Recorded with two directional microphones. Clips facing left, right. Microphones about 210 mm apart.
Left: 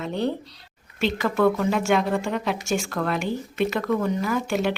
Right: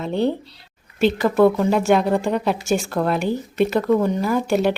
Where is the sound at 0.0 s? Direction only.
30° right (ahead or behind).